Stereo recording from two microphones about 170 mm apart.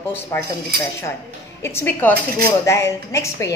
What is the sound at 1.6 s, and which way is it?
A woman's voice, 15° left (ahead or behind).